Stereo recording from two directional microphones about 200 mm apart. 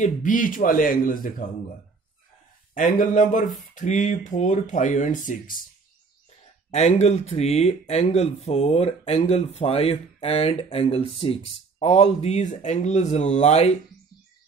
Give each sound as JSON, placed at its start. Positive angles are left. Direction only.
{"t": 0.0, "sound": "speech", "side_deg": 40}
{"t": 2.7, "sound": "speech", "side_deg": 40}
{"t": 6.7, "sound": "speech", "side_deg": 35}